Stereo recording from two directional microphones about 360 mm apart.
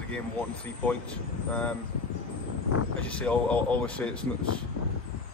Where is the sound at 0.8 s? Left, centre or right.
Centre.